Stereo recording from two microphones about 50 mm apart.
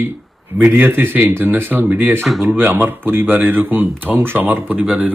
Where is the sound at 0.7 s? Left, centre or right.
Right.